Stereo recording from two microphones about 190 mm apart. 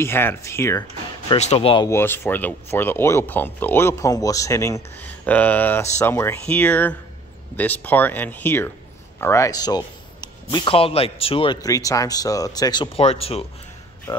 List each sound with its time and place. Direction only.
0.0 s speech: 10° left (ahead or behind)
1.3 s speech: 35° left (ahead or behind)
1.9 s a man's voice: 10° left (ahead or behind); by 11.5 s 30° left (ahead or behind)
11.6 s speech: 20° left (ahead or behind)
14.1 s speech: 20° left (ahead or behind)